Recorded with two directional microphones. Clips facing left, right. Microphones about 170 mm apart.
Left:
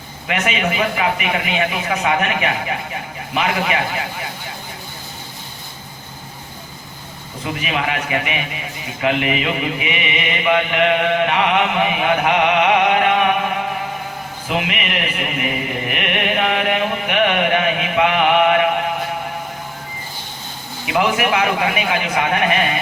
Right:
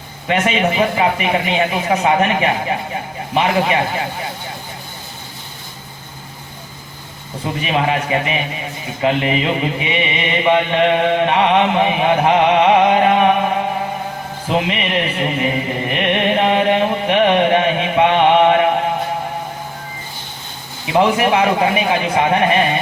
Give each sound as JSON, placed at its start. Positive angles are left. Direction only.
{"t": 0.3, "sound": "a man's voice", "side_deg": -30}
{"t": 7.4, "sound": "a man's voice", "side_deg": -30}
{"t": 14.4, "sound": "chant", "side_deg": -30}
{"t": 20.8, "sound": "a man's voice", "side_deg": -30}